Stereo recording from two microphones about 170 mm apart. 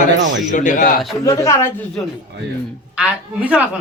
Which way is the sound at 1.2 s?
20° left (ahead or behind).